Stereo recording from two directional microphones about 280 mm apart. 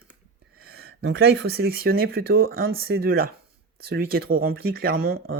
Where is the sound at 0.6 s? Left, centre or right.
Right.